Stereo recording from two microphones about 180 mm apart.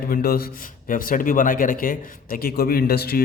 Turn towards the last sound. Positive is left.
turn(degrees=60)  # may be behind; listen again after turning